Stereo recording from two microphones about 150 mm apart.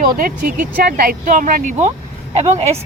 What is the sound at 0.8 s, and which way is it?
Speech, 80° right.